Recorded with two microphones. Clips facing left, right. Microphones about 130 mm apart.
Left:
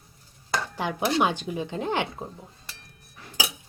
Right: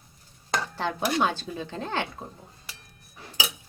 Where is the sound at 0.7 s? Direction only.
15° left (ahead or behind).